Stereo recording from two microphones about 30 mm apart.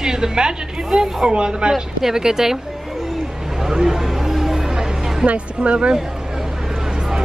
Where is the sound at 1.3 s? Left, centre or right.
Right.